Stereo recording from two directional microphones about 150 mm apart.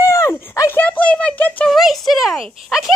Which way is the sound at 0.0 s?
20° left (ahead or behind).